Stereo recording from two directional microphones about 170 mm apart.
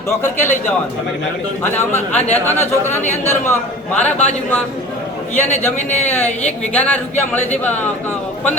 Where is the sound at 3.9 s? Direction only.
40° left (ahead or behind).